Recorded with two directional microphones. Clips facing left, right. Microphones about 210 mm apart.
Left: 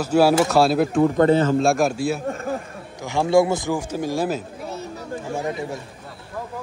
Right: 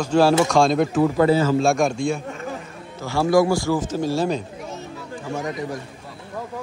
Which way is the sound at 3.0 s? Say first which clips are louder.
Even; 20° left (ahead or behind).